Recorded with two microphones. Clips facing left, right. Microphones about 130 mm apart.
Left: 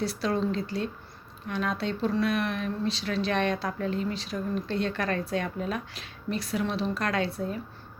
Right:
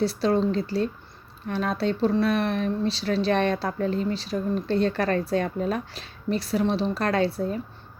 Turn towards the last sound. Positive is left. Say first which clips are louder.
# right 5 dB
turn(degrees=-30)  # may be behind; listen again after turning